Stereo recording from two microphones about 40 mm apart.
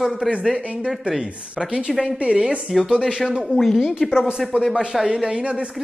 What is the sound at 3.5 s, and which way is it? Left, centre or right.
Speech, centre.